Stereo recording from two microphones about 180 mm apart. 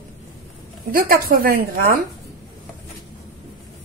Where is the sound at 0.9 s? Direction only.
55° right (ahead or behind).